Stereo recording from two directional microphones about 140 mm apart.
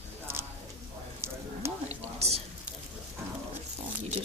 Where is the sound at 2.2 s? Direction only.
50° right (ahead or behind).